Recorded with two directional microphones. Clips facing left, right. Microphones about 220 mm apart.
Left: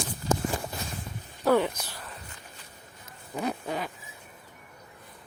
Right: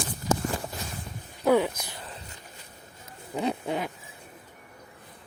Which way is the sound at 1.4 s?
10° right (ahead or behind).